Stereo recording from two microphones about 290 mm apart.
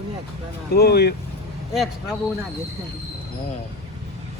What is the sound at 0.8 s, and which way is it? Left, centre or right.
Speech, left.